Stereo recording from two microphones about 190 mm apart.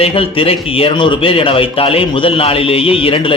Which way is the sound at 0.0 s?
30° left (ahead or behind).